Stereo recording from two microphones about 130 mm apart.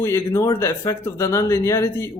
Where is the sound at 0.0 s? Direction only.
20° left (ahead or behind).